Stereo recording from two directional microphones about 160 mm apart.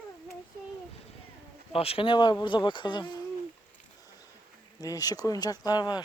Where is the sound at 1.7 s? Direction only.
35° left (ahead or behind).